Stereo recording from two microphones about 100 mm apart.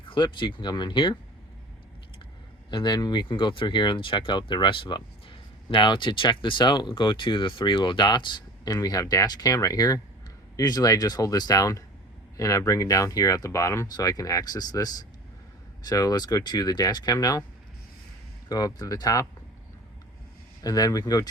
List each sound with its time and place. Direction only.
0.0 s speech: 55° left (ahead or behind)
2.6 s speech: 50° left (ahead or behind)
18.4 s speech: 40° left (ahead or behind)
20.6 s speech: 40° left (ahead or behind)